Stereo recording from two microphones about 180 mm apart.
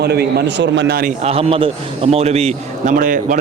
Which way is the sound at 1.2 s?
35° right (ahead or behind).